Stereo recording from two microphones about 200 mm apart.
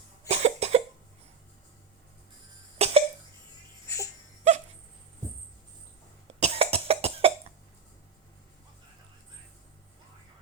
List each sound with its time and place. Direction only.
0.3 s cough: 35° right (ahead or behind)
2.7 s cough: 30° right (ahead or behind)
3.8 s music: 15° left (ahead or behind)
6.4 s cough: 30° right (ahead or behind)